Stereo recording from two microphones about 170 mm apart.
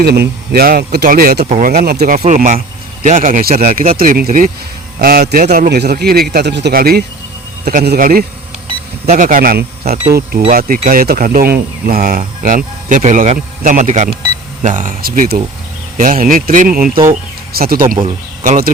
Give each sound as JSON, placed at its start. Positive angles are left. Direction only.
{"t": 0.0, "sound": "speech", "side_deg": -65}
{"t": 2.1, "sound": "a man's voice", "side_deg": -45}
{"t": 7.6, "sound": "a man's voice", "side_deg": -55}